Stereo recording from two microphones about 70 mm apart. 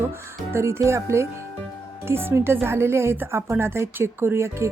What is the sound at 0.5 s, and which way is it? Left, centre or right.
A woman's voice, right.